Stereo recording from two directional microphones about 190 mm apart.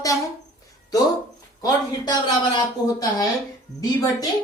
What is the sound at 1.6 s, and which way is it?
Speech, 20° left (ahead or behind).